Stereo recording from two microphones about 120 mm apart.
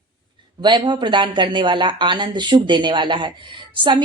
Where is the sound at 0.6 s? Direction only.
40° right (ahead or behind).